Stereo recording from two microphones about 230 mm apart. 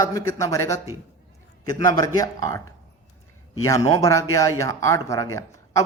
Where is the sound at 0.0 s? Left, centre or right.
Centre.